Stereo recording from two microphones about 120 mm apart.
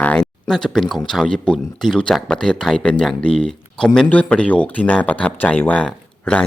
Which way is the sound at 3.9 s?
10° left (ahead or behind).